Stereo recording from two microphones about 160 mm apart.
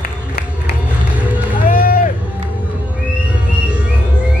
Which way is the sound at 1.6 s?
65° left (ahead or behind).